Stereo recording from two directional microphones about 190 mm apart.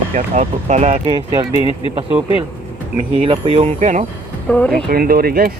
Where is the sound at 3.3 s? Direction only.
30° right (ahead or behind).